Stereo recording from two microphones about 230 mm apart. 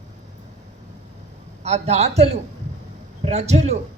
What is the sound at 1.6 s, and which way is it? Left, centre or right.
A woman's voice, right.